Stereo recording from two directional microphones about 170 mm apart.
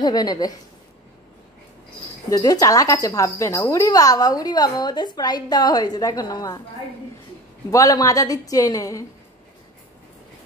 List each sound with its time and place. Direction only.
0.0 s speech: 25° left (ahead or behind)
2.2 s speech: 20° left (ahead or behind)
7.7 s speech: 20° left (ahead or behind)